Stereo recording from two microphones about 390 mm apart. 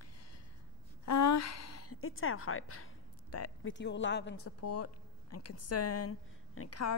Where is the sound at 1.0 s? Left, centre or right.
Left.